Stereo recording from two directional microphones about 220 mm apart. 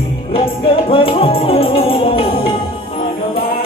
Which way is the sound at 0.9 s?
25° left (ahead or behind).